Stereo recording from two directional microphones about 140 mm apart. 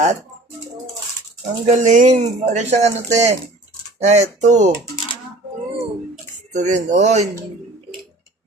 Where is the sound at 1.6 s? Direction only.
55° right (ahead or behind).